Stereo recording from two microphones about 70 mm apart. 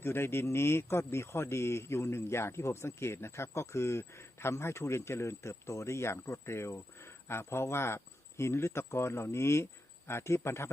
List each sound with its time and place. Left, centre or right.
0.0 s speech: left